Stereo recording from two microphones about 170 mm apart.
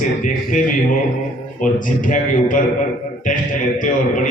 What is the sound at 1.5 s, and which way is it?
A man's voice, 50° left (ahead or behind).